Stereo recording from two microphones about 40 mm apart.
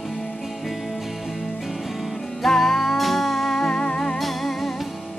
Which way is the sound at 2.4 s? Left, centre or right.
Centre.